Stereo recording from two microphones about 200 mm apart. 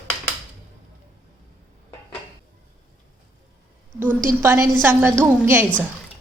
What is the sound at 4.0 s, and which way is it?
A woman's voice, 10° right (ahead or behind).